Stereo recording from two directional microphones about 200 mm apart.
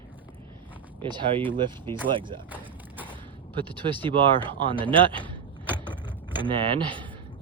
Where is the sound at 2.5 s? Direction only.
10° right (ahead or behind).